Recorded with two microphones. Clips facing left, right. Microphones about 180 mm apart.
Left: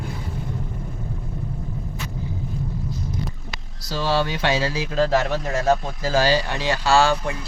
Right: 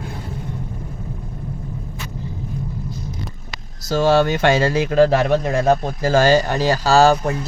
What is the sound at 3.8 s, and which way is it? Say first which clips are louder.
Speech: right 7 dB; 50° right (ahead or behind).